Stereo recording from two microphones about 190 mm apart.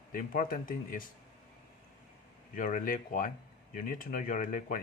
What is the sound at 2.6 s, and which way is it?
Speech, 45° left (ahead or behind).